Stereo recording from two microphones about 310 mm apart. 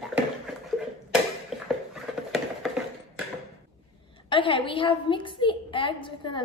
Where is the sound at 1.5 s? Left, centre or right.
Centre.